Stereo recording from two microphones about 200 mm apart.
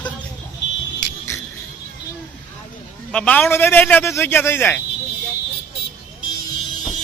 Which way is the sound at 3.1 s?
5° left (ahead or behind).